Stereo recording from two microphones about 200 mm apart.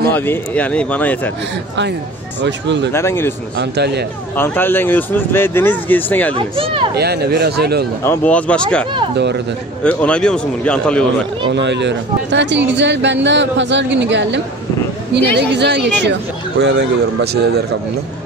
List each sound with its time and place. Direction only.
0.0 s speech: 10° left (ahead or behind)
2.4 s a man's voice: 60° right (ahead or behind)
2.9 s speech: 10° left (ahead or behind)
3.5 s a man's voice: 55° right (ahead or behind)
4.4 s speech: 10° left (ahead or behind)
6.3 s speech: 25° right (ahead or behind)
7.0 s speech: 55° right (ahead or behind)
8.0 s speech: 10° left (ahead or behind)
9.8 s speech: 5° left (ahead or behind)
11.4 s a man's voice: 60° right (ahead or behind)